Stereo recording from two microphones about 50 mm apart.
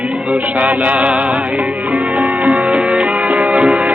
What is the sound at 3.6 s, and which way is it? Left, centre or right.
Music, centre.